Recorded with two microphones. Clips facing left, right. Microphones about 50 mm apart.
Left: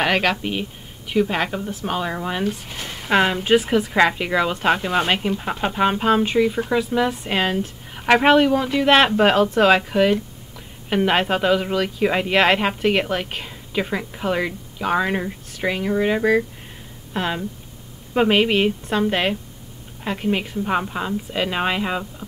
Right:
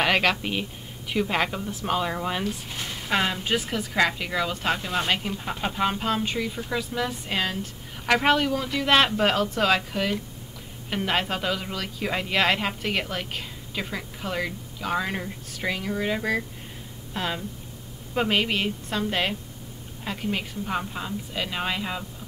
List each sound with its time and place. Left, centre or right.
0.0 s speech: centre
3.1 s a woman's voice: left